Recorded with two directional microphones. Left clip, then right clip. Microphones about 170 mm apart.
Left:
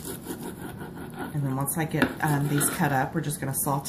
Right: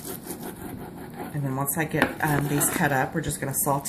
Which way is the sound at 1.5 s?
15° right (ahead or behind).